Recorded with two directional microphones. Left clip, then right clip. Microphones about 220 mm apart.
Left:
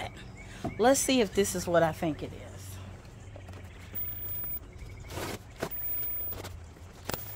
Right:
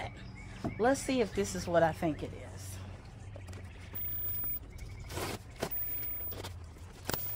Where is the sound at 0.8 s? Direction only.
45° left (ahead or behind).